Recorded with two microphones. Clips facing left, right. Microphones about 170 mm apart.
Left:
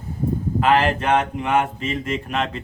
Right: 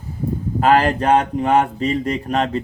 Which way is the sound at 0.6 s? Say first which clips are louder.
Right 4 dB; 40° right (ahead or behind).